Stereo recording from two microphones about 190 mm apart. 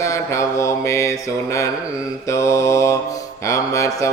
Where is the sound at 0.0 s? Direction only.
15° left (ahead or behind).